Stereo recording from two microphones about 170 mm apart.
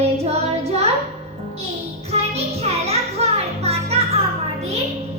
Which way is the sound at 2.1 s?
35° right (ahead or behind).